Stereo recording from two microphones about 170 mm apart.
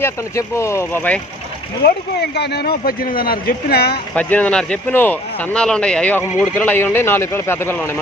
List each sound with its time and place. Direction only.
0.0 s speech: 15° left (ahead or behind)
2.3 s speech: 75° left (ahead or behind)
4.1 s speech: 10° left (ahead or behind)